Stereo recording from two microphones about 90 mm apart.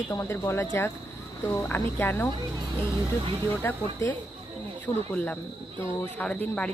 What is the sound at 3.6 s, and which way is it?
Speech, 20° left (ahead or behind).